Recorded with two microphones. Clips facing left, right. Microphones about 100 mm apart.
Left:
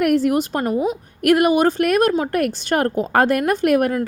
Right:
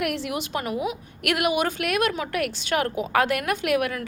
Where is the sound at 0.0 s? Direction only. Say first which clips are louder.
Left 11 dB; 45° left (ahead or behind).